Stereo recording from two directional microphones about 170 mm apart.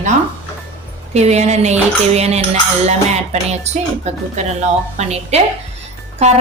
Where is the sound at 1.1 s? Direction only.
40° right (ahead or behind).